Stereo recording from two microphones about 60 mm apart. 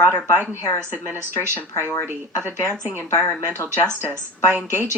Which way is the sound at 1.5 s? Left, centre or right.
Left.